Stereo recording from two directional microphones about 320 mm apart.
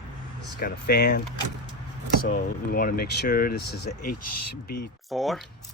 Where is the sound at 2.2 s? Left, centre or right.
Left.